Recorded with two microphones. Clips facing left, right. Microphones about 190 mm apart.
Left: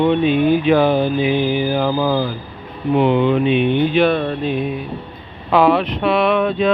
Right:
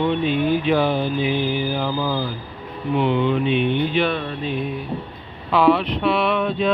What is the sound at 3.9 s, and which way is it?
Speech, 50° left (ahead or behind).